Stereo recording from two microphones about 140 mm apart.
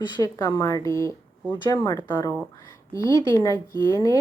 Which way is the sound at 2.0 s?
30° left (ahead or behind).